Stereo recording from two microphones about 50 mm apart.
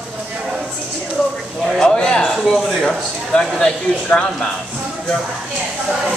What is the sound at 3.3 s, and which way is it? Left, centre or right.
Speech, centre.